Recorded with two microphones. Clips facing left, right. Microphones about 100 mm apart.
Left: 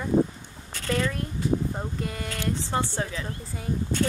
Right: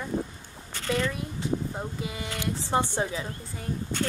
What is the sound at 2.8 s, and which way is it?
Speech, 15° right (ahead or behind).